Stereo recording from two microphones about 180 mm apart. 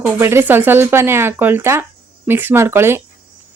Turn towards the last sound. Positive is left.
turn(degrees=-15)  # may be behind; listen again after turning